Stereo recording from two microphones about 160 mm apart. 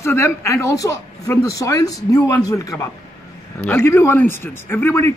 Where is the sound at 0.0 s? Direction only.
15° left (ahead or behind).